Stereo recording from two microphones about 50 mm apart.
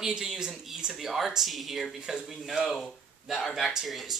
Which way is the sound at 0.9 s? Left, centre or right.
Centre.